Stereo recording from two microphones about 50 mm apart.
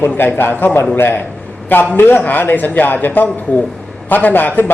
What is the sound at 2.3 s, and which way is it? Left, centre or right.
A man's voice, left.